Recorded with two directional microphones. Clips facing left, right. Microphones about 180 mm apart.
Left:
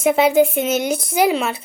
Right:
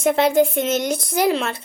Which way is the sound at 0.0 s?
5° left (ahead or behind).